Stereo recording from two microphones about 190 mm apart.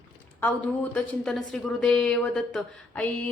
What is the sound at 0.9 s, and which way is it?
A woman's voice, 5° left (ahead or behind).